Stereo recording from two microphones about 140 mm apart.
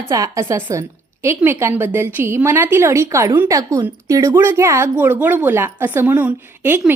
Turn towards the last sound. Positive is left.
turn(degrees=-15)  # may be behind; listen again after turning